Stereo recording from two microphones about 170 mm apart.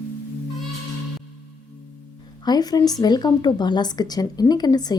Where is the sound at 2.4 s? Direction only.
25° left (ahead or behind).